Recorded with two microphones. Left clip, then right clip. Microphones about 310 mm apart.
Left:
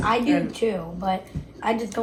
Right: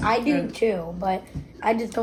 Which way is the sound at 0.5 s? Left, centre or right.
Right.